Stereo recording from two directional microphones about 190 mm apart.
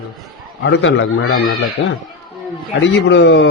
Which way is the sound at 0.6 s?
80° left.